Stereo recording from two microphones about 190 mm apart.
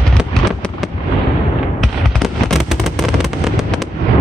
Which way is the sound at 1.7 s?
Centre (ahead or behind).